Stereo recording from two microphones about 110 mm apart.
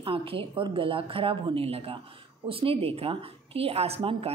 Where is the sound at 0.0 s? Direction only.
55° right (ahead or behind).